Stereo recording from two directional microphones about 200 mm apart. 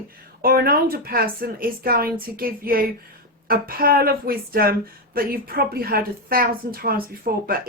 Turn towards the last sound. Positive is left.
turn(degrees=-45)  # may be behind; listen again after turning